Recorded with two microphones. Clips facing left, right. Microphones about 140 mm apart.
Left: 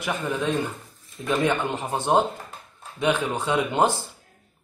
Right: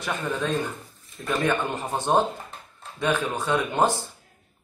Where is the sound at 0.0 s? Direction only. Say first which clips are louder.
Left 2 dB; 15° left (ahead or behind).